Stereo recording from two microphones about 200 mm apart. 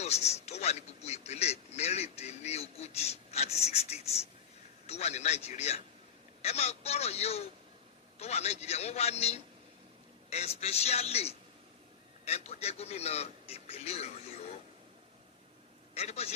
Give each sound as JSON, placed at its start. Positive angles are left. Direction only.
{"t": 0.0, "sound": "a man's voice", "side_deg": 35}
{"t": 16.0, "sound": "a man's voice", "side_deg": 30}